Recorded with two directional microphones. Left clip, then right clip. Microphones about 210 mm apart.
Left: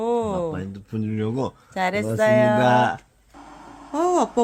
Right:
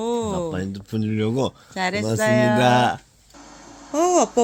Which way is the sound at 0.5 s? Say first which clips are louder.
Right 3 dB; 30° right (ahead or behind).